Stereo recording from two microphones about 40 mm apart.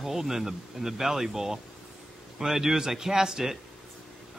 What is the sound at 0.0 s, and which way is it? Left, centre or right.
A man's voice, centre.